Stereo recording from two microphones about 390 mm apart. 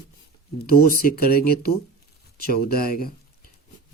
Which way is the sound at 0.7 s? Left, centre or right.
Left.